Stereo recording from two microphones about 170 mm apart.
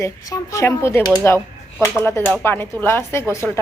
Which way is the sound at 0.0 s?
20° left (ahead or behind).